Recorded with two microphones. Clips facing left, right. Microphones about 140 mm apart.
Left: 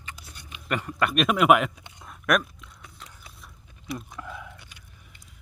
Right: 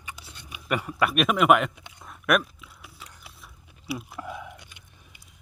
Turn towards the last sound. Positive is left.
turn(degrees=-15)  # may be behind; listen again after turning